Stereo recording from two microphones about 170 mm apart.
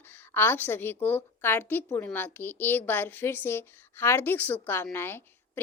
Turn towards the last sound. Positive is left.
turn(degrees=10)  # may be behind; listen again after turning